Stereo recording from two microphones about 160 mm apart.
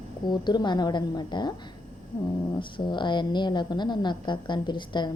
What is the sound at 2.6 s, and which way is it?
A woman's voice, 30° left (ahead or behind).